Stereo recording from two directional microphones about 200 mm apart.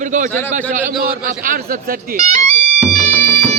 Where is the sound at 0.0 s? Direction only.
40° right (ahead or behind).